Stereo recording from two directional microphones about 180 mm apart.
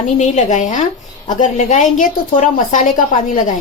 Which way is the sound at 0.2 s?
40° left (ahead or behind).